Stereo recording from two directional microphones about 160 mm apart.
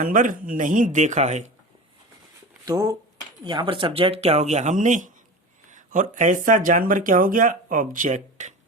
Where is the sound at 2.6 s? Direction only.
20° right (ahead or behind).